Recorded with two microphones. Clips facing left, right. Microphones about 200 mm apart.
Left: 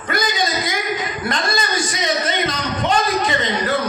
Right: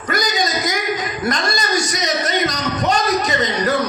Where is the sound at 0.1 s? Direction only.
40° right (ahead or behind).